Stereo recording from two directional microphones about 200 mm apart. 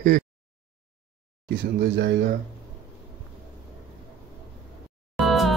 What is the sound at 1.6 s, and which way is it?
Speech, 55° right (ahead or behind).